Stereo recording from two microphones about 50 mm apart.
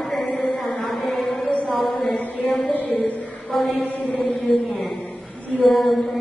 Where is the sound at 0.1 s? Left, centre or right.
Centre.